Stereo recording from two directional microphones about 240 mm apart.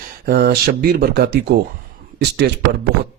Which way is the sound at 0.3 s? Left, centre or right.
Right.